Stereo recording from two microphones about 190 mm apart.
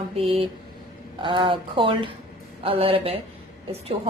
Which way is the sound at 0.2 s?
30° right (ahead or behind).